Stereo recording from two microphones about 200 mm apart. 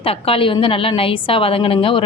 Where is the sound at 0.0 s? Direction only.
30° left (ahead or behind).